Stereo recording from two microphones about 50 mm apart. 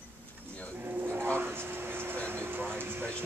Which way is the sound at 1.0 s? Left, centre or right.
Right.